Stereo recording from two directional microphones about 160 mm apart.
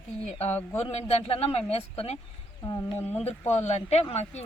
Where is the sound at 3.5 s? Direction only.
40° left (ahead or behind).